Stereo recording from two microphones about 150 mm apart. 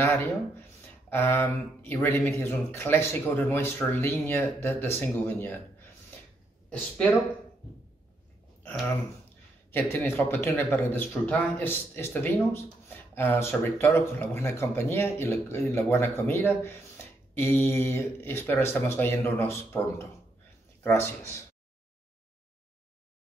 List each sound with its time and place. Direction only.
0.0 s speech: 15° left (ahead or behind)
9.7 s speech: 15° left (ahead or behind)
20.8 s speech: 15° left (ahead or behind)